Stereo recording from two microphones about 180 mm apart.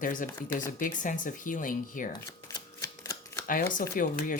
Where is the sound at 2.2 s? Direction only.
15° left (ahead or behind).